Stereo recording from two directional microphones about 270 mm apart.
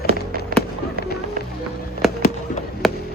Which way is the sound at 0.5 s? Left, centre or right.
Right.